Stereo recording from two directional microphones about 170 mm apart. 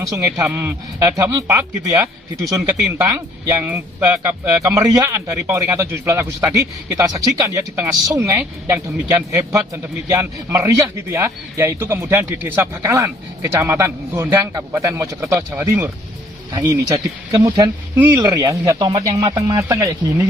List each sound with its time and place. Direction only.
0.0 s a man's voice: 20° right (ahead or behind)
17.9 s speech: 10° right (ahead or behind)